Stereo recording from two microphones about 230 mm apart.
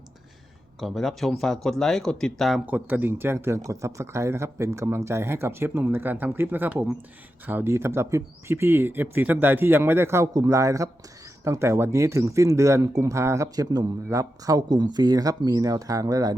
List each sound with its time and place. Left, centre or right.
0.8 s speech: centre